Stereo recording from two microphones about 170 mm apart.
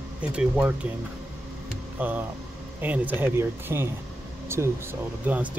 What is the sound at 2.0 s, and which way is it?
Speech, 10° right (ahead or behind).